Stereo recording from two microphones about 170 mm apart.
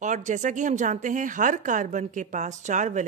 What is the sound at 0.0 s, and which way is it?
A woman's voice, 45° right (ahead or behind).